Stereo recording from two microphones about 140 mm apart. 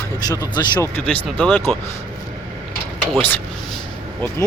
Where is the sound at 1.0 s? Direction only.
10° left (ahead or behind).